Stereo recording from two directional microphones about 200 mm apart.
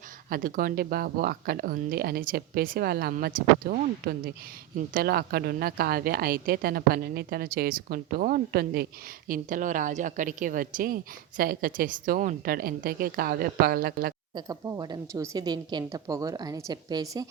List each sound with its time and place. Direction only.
0.3 s a woman's voice: 45° right (ahead or behind)
14.3 s speech: 15° right (ahead or behind)